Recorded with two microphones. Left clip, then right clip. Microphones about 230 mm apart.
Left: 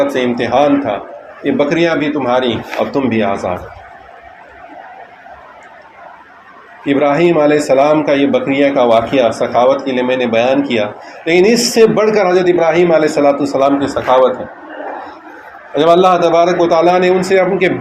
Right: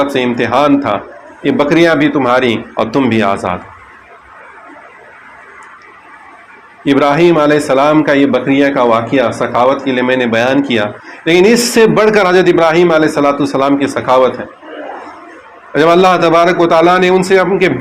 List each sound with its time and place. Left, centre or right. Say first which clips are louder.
0.0 s a man's voice: right 1 dB; right
6.8 s a man's voice: right 2 dB; right
15.7 s a man's voice: right 1 dB; right